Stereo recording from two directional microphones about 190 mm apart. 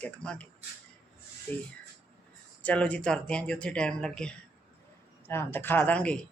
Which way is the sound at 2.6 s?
5° left (ahead or behind).